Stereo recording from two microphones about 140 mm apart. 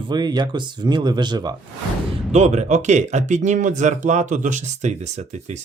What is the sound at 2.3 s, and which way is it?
Speech, 55° right (ahead or behind).